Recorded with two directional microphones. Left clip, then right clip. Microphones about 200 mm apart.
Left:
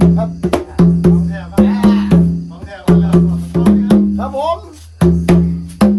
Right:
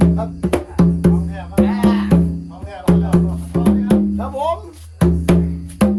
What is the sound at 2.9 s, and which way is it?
Music, centre (ahead or behind).